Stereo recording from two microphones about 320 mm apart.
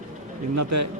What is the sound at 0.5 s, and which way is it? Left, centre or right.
Speech, right.